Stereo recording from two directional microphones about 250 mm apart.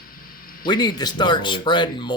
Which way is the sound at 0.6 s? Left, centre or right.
Centre.